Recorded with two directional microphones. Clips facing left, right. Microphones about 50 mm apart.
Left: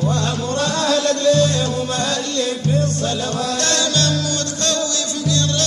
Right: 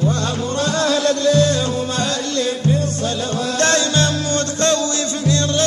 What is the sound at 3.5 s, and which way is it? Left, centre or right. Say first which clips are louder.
Music: right 6 dB; right.